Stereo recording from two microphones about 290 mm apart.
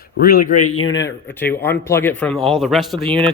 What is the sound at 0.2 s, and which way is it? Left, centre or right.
Speech, left.